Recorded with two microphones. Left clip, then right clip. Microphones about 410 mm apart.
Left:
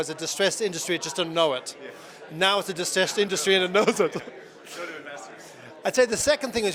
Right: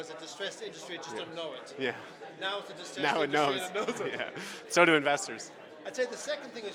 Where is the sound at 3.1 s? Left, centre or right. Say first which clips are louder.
Left 4 dB; left.